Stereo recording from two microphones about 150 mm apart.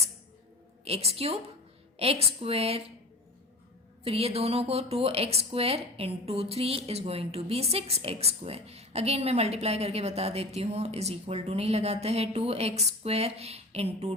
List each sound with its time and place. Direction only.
0.9 s speech: 40° right (ahead or behind)
4.0 s speech: 40° right (ahead or behind)